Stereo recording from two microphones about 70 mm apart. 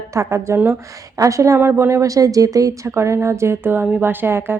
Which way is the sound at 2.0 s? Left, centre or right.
Right.